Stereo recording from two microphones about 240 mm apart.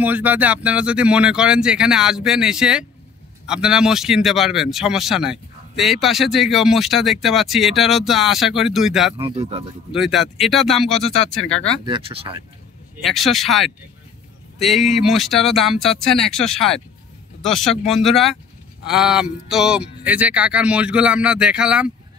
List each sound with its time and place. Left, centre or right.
0.0 s speech: centre
9.2 s speech: right
9.9 s speech: centre
11.8 s speech: right
12.9 s speech: centre